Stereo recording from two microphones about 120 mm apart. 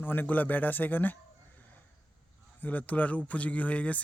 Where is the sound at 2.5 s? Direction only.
15° left (ahead or behind).